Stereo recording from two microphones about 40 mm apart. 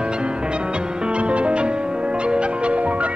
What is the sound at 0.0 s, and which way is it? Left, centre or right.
Music, right.